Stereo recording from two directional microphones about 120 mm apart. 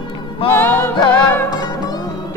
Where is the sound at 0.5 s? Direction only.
15° left (ahead or behind).